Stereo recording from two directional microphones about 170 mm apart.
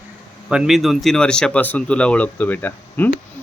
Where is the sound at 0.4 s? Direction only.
5° right (ahead or behind).